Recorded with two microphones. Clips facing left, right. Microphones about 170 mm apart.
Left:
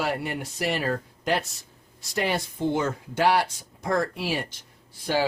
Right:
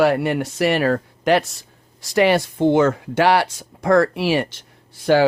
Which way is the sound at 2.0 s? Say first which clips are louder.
Right 11 dB; 90° right.